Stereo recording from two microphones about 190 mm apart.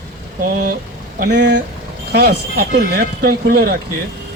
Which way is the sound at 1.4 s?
65° right (ahead or behind).